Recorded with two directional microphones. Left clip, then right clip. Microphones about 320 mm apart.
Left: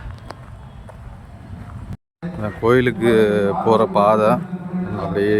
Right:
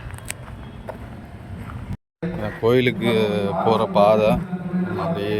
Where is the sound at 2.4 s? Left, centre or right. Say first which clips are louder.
Left 2 dB; centre.